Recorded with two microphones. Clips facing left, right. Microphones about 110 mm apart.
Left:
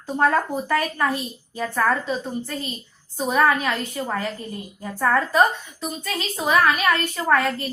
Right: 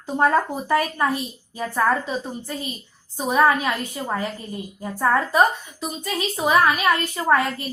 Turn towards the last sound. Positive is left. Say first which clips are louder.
# right 1 dB
turn(degrees=-15)  # may be behind; listen again after turning